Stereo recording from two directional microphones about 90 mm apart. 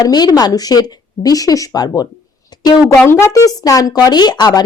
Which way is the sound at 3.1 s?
30° left (ahead or behind).